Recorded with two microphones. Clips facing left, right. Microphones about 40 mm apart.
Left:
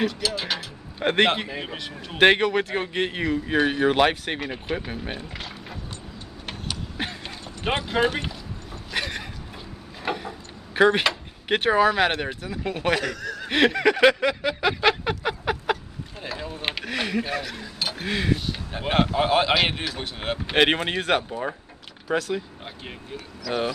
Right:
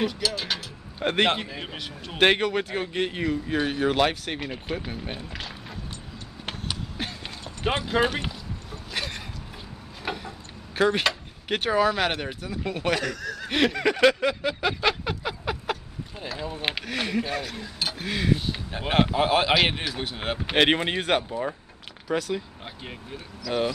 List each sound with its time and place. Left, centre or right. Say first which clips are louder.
0.0 s a man's voice: left 1 dB; centre
7.2 s clip-clop: right 2 dB; centre
10.1 s a sound: left 3 dB; centre
11.0 s speech: left 2 dB; centre
12.4 s a sound: left 1 dB; centre
16.4 s a sound: right 2 dB; centre
17.0 s a man's voice: left 1 dB; centre
21.2 s speech: even; centre
23.5 s a man's voice: even; centre